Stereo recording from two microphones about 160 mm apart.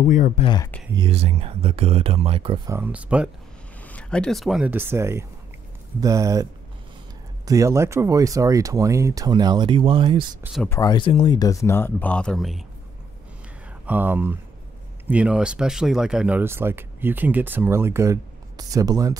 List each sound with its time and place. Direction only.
0.0 s speech: 50° left (ahead or behind)
0.4 s speech: 30° left (ahead or behind)
0.9 s speech: 35° right (ahead or behind)
2.6 s speech: 15° right (ahead or behind)
3.8 s speech: 5° left (ahead or behind); by 6.4 s 20° right (ahead or behind)
7.4 s speech: 20° right (ahead or behind)
10.7 s speech: 25° left (ahead or behind); by 12.6 s centre (ahead or behind)
13.8 s speech: 10° right (ahead or behind)